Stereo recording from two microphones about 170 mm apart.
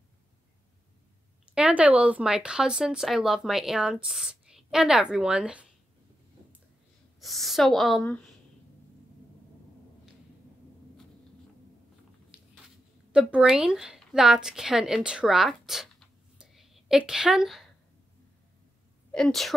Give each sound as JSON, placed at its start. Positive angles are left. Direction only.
{"t": 1.5, "sound": "speech", "side_deg": -5}
{"t": 7.2, "sound": "speech", "side_deg": 0}
{"t": 12.3, "sound": "a sound", "side_deg": -5}
{"t": 13.1, "sound": "a woman's voice", "side_deg": -5}
{"t": 19.1, "sound": "speech", "side_deg": 0}